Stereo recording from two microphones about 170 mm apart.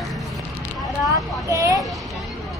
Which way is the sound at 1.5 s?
20° right (ahead or behind).